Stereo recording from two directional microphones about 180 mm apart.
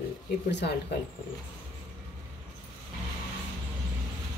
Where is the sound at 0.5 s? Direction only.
75° left (ahead or behind).